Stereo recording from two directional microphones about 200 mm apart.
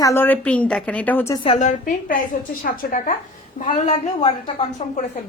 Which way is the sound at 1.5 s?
40° left (ahead or behind).